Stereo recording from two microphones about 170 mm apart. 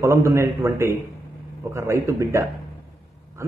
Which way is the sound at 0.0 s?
15° right (ahead or behind).